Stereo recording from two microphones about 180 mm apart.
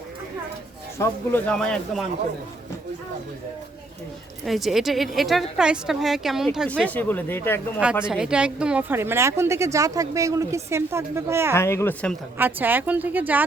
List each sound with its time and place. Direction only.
0.9 s a woman's voice: 15° left (ahead or behind)
4.4 s a woman's voice: centre (ahead or behind)
8.0 s a woman's voice: 5° right (ahead or behind)
11.5 s speech: 15° left (ahead or behind)
12.4 s a woman's voice: 10° right (ahead or behind)